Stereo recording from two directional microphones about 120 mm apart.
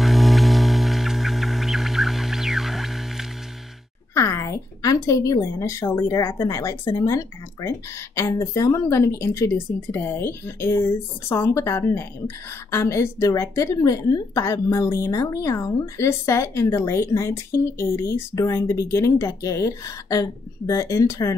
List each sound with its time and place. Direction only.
0.0 s music: centre (ahead or behind)
4.1 s a woman's voice: 25° left (ahead or behind)